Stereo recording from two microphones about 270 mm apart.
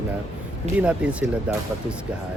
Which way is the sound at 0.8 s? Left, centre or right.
Centre.